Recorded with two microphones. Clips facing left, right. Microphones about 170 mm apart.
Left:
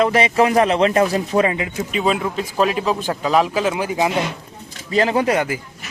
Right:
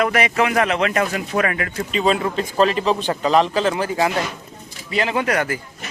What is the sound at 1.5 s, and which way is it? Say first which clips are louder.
Speech: left 2 dB; 20° left (ahead or behind).